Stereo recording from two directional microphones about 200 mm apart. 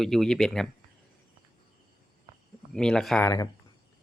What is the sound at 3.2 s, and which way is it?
Speech, 15° left (ahead or behind).